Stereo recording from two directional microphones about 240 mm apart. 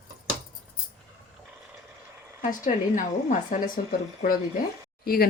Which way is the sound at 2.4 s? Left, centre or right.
Left.